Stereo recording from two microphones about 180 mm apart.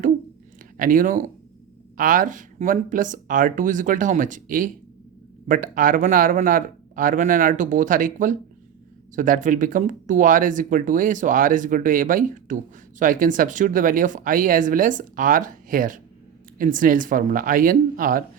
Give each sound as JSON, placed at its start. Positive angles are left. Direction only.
{"t": 0.8, "sound": "speech", "side_deg": -50}